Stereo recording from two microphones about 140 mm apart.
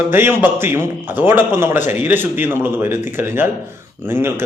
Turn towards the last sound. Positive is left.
turn(degrees=-15)  # may be behind; listen again after turning